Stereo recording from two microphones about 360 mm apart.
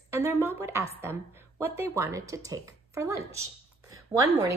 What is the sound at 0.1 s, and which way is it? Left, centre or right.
A woman's voice, centre.